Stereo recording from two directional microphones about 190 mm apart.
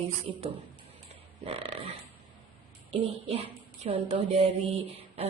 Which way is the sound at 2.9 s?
35° right (ahead or behind).